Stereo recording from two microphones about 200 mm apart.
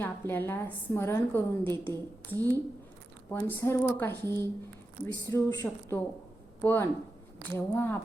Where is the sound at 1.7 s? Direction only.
20° right (ahead or behind).